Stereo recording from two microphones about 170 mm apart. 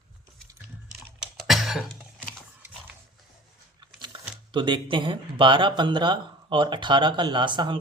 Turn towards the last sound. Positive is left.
turn(degrees=-25)  # may be behind; listen again after turning